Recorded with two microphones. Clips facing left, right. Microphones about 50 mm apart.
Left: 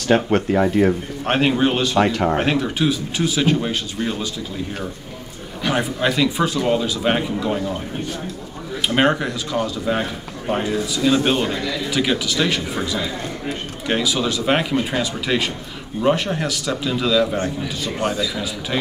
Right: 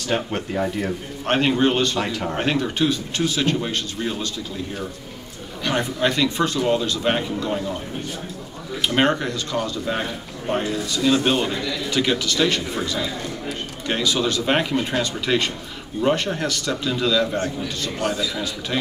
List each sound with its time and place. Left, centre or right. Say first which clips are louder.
0.3 s speech: left 7 dB; left
1.2 s a man's voice: left 1 dB; centre
5.6 s a man's voice: left 1 dB; centre
8.8 s a man's voice: left 2 dB; centre